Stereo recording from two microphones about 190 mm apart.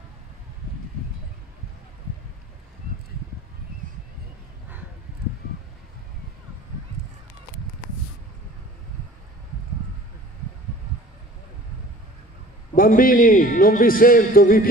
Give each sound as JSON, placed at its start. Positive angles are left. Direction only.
{"t": 12.7, "sound": "a man's voice", "side_deg": 50}